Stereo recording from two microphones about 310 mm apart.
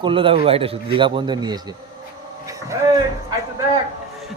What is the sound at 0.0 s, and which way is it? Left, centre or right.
A man's voice, centre.